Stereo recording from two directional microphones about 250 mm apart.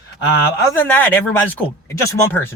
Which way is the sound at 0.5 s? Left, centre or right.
Centre.